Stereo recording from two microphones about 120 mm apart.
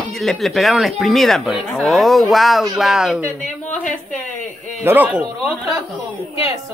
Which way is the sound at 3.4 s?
90° left.